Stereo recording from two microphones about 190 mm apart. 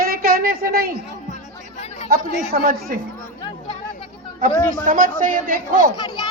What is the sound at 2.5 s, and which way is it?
Speech, 45° right (ahead or behind).